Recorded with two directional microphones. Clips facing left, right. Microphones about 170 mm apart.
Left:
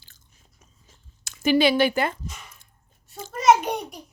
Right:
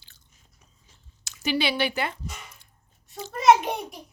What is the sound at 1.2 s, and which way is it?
Speech, 50° left (ahead or behind).